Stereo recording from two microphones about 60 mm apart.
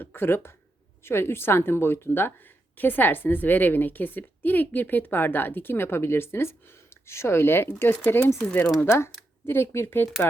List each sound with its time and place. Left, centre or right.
0.0 s a woman's voice: left